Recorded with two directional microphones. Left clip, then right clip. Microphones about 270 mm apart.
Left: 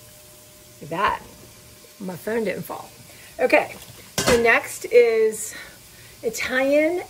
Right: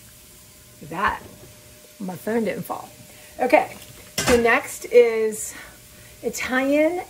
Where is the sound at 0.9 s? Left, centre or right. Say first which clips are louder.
Left 1 dB; centre.